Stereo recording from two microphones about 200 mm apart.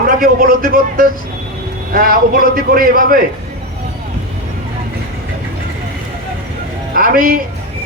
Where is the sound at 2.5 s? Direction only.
45° right (ahead or behind).